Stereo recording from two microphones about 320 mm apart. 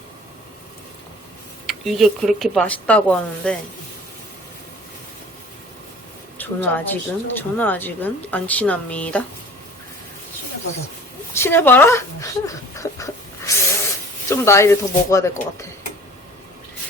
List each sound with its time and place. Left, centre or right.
1.6 s speech: centre
6.4 s speech: centre
11.3 s a sound: centre
14.3 s speech: centre